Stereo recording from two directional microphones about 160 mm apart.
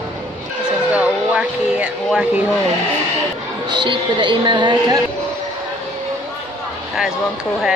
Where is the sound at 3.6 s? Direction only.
30° right (ahead or behind).